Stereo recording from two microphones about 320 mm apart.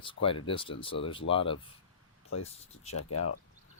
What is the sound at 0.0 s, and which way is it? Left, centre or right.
Speech, centre.